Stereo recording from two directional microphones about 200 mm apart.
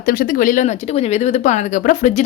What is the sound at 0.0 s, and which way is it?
Speech, 45° left (ahead or behind).